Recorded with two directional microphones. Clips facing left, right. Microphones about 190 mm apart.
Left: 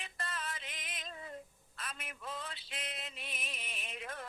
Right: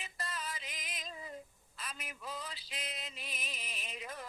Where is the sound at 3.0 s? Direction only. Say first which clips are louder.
Even; centre (ahead or behind).